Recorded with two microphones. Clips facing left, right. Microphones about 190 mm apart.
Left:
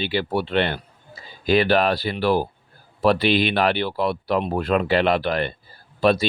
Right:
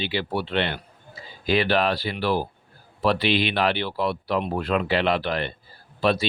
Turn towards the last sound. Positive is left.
turn(degrees=45)  # may be behind; listen again after turning